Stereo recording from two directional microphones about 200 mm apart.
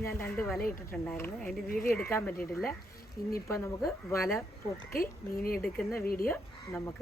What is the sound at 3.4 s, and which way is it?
Speech, 15° left (ahead or behind).